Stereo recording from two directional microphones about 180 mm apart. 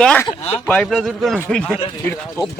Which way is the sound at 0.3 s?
35° left (ahead or behind).